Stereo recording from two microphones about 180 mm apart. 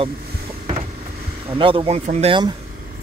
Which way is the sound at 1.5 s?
30° right (ahead or behind).